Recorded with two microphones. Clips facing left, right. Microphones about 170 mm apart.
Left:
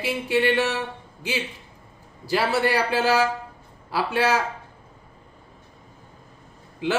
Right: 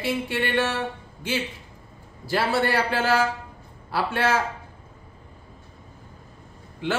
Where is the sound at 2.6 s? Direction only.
15° left (ahead or behind).